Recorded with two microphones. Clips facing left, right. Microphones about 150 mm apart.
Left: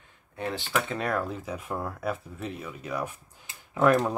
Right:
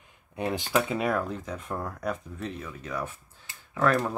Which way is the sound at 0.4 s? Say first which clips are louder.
Right 3 dB; 15° right (ahead or behind).